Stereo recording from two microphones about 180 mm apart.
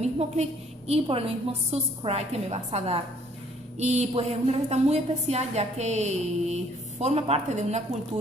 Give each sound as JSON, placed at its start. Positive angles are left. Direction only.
{"t": 0.0, "sound": "a woman's voice", "side_deg": -35}